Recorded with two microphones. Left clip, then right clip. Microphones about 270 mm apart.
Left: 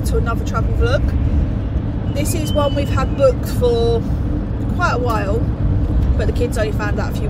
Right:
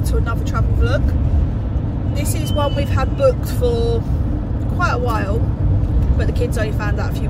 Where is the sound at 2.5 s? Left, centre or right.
Centre.